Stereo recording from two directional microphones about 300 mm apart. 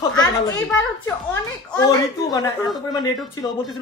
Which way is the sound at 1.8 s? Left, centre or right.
Centre.